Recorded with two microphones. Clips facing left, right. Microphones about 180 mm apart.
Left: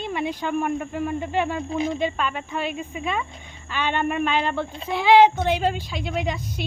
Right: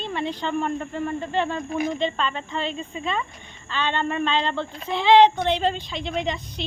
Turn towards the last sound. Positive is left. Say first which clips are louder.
# even
turn(degrees=5)  # may be behind; listen again after turning